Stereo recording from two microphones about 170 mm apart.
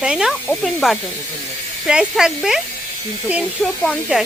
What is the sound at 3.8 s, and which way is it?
Speech, centre (ahead or behind).